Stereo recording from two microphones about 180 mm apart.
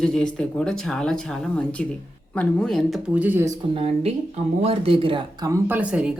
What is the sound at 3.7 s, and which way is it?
Speech, 35° right (ahead or behind).